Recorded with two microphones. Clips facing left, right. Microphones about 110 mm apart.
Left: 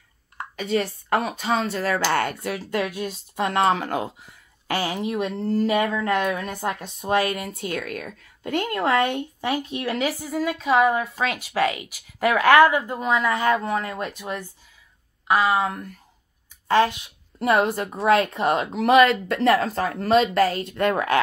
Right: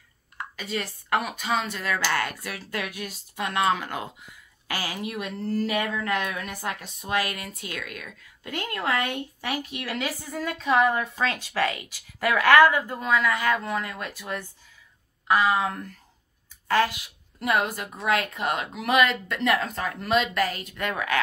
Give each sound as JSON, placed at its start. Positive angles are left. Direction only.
{"t": 0.4, "sound": "speech", "side_deg": 25}
{"t": 4.6, "sound": "a woman's voice", "side_deg": 25}
{"t": 17.4, "sound": "speech", "side_deg": 35}